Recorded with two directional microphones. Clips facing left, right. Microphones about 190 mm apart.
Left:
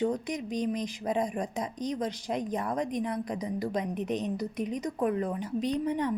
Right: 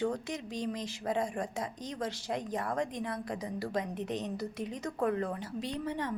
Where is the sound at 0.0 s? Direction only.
20° left (ahead or behind).